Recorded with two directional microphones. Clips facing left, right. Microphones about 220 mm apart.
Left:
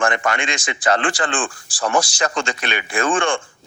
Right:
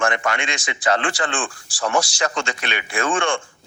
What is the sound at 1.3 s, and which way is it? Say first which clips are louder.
Speech: left 3 dB; 35° left (ahead or behind).